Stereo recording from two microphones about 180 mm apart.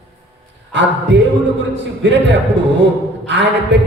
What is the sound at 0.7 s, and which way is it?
A man's voice, 75° right (ahead or behind).